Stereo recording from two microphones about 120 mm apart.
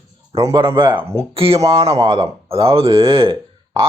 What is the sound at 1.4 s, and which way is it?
Speech, 50° right (ahead or behind).